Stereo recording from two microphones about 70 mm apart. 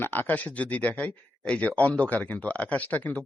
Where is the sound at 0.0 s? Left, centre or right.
Left.